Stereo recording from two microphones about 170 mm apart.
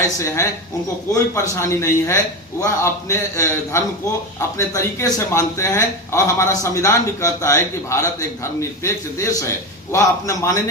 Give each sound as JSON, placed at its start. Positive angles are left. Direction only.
{"t": 1.1, "sound": "a man's voice", "side_deg": 20}